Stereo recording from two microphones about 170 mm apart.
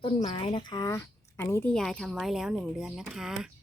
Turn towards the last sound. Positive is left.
turn(degrees=0)  # may be behind; listen again after turning